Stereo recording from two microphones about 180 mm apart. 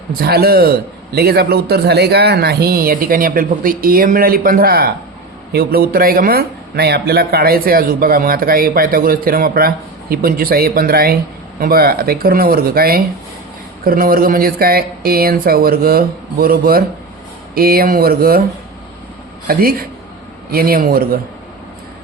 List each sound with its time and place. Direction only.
0.1 s speech: 55° right (ahead or behind)
19.5 s speech: 55° right (ahead or behind)